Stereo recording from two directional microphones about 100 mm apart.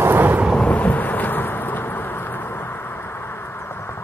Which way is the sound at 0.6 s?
15° left (ahead or behind).